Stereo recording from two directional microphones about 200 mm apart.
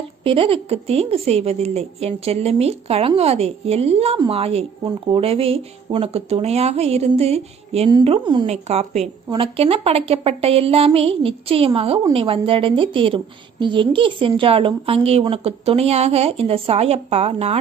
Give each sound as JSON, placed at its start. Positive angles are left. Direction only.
{"t": 0.3, "sound": "a woman's voice", "side_deg": -25}